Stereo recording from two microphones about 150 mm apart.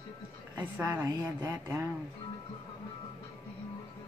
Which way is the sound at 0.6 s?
15° right (ahead or behind).